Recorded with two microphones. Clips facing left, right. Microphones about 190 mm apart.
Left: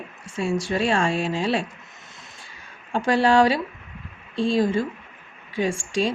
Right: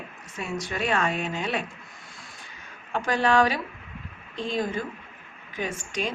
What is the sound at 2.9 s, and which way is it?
A woman's voice, 30° left (ahead or behind).